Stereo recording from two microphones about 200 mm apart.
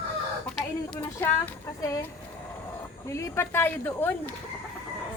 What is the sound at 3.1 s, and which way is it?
Speech, 15° left (ahead or behind).